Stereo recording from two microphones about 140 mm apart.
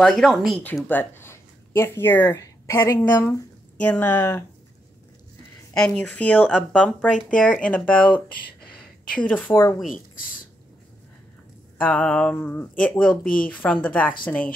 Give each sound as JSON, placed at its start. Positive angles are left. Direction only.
{"t": 0.0, "sound": "speech", "side_deg": 0}
{"t": 5.8, "sound": "speech", "side_deg": 5}
{"t": 7.7, "sound": "speech", "side_deg": 10}
{"t": 9.2, "sound": "speech", "side_deg": 10}
{"t": 11.8, "sound": "speech", "side_deg": 10}
{"t": 13.2, "sound": "speech", "side_deg": 85}
{"t": 13.5, "sound": "speech", "side_deg": 10}